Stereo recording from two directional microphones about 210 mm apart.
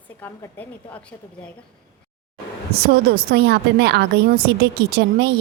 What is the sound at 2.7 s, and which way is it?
A woman's voice, 45° right (ahead or behind).